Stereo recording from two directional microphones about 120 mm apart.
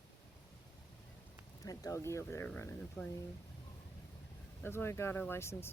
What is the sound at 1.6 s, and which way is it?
Speech, 25° left (ahead or behind).